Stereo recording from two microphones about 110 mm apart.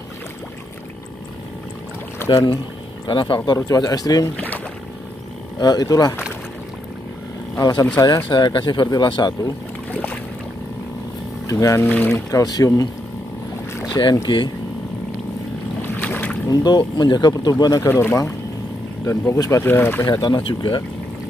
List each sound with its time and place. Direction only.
2.2 s speech: 40° left (ahead or behind)
3.4 s speech: 35° left (ahead or behind)
5.6 s speech: 40° left (ahead or behind)
7.5 s speech: 35° left (ahead or behind)
11.4 s speech: 30° left (ahead or behind)
13.9 s speech: 40° left (ahead or behind)
15.8 s boat: 15° left (ahead or behind)
16.4 s speech: 40° left (ahead or behind)
17.8 s speech: 20° left (ahead or behind)
20.1 s speech: 40° left (ahead or behind)